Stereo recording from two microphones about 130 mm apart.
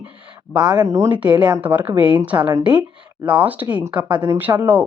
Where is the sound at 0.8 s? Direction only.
20° right (ahead or behind).